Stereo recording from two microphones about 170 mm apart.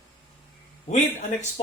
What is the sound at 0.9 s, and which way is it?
Speech, 45° left (ahead or behind).